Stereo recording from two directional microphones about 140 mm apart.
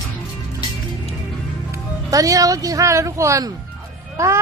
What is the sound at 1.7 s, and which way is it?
Speech, 25° right (ahead or behind).